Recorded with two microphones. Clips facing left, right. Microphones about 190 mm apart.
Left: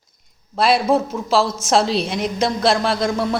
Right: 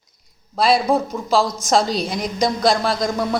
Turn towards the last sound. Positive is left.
turn(degrees=0)  # may be behind; listen again after turning